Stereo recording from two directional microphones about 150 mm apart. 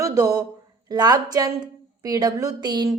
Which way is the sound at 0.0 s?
25° right (ahead or behind).